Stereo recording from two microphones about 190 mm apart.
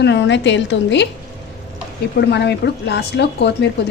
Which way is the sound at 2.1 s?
65° left (ahead or behind).